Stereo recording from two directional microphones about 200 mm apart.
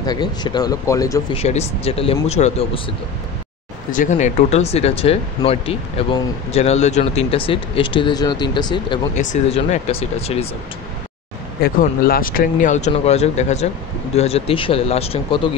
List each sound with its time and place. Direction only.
0.0 s speech: 20° left (ahead or behind)
1.3 s speech: 30° left (ahead or behind)
3.9 s speech: 40° left (ahead or behind); by 9.0 s 25° left (ahead or behind)
9.1 s speech: 35° left (ahead or behind)
11.6 s speech: 45° left (ahead or behind); by 15.4 s 30° left (ahead or behind)